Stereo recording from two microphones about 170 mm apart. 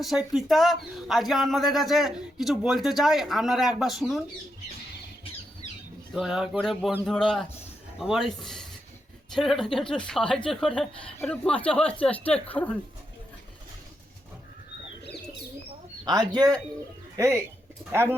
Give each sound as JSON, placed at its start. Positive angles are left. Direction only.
{"t": 0.0, "sound": "speech", "side_deg": 0}
{"t": 5.6, "sound": "squawk", "side_deg": -25}
{"t": 6.1, "sound": "speech", "side_deg": 0}
{"t": 16.0, "sound": "speech", "side_deg": -25}